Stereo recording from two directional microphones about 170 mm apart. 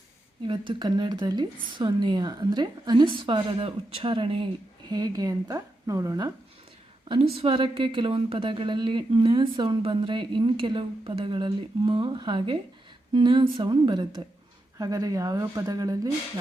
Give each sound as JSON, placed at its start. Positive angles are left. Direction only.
{"t": 0.4, "sound": "a woman's voice", "side_deg": -30}
{"t": 7.3, "sound": "a woman's voice", "side_deg": -30}